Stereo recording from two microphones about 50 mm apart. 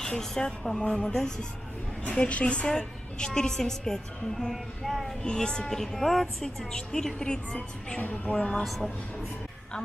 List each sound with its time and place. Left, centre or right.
0.0 s a woman's voice: centre
2.0 s a woman's voice: left; by 5.1 s centre
5.2 s a woman's voice: centre
8.0 s a woman's voice: left